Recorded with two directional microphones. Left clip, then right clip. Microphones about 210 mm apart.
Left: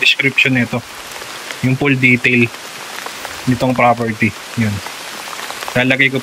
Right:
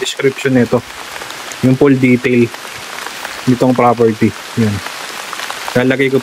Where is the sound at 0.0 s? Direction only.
25° right (ahead or behind).